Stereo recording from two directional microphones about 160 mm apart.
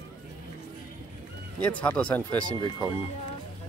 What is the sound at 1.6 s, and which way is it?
Speech, 10° left (ahead or behind).